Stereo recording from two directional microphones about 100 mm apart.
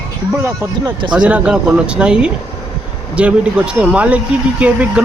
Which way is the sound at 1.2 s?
10° right (ahead or behind).